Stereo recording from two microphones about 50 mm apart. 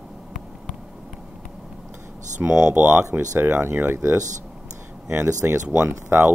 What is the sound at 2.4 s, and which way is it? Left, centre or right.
Speech, right.